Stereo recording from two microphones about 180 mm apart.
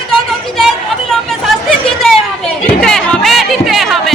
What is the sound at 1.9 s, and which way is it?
Chatter, centre (ahead or behind).